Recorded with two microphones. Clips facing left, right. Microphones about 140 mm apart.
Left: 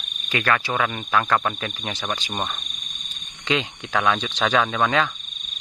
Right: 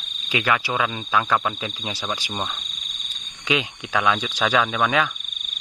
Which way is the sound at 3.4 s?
10° right (ahead or behind).